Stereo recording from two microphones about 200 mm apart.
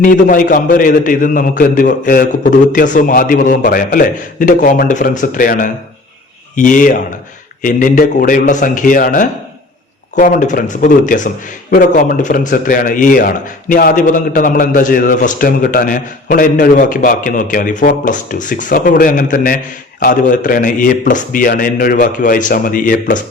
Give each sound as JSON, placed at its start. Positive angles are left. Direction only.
{"t": 0.0, "sound": "a man's voice", "side_deg": 40}